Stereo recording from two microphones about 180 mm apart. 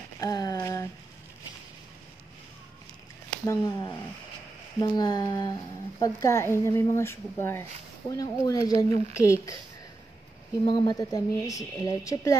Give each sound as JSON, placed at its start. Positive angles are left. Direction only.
{"t": 0.2, "sound": "a woman's voice", "side_deg": 20}
{"t": 3.4, "sound": "a woman's voice", "side_deg": 20}
{"t": 10.6, "sound": "a woman's voice", "side_deg": 25}